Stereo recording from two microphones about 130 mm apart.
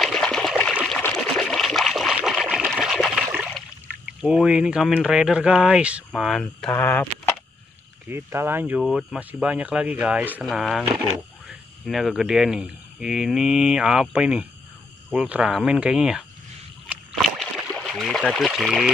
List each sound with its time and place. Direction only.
0.0 s trickle: 5° left (ahead or behind)
1.0 s a sound: 5° left (ahead or behind)
2.7 s water: centre (ahead or behind)
4.2 s speech: 5° right (ahead or behind)
6.7 s speech: 15° left (ahead or behind)
8.1 s speech: 20° right (ahead or behind)
10.4 s speech: centre (ahead or behind)
17.1 s rowboat: centre (ahead or behind)
17.8 s speech: centre (ahead or behind)